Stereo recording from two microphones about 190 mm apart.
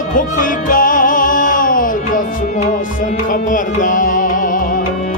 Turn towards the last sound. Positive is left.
turn(degrees=45)  # may be behind; listen again after turning